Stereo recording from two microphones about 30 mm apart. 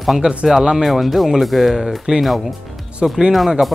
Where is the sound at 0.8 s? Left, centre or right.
Centre.